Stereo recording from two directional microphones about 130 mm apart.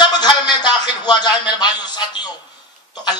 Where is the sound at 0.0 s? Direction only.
35° left (ahead or behind).